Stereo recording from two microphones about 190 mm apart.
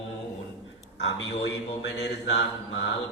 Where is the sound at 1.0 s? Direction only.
75° left (ahead or behind).